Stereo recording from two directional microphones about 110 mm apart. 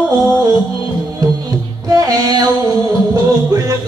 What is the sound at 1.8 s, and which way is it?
Speech, 35° right (ahead or behind).